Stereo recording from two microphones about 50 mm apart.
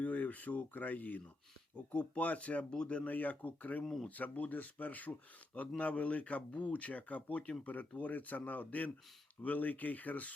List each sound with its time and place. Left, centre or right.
0.0 s speech: left
3.1 s speech: left